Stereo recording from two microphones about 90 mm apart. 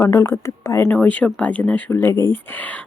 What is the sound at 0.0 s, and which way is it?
Speech, 30° left (ahead or behind).